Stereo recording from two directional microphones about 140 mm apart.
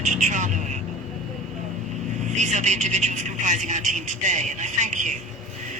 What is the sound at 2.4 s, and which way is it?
Speech, 55° right (ahead or behind).